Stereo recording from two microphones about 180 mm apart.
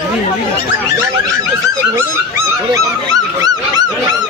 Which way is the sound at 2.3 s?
20° right (ahead or behind).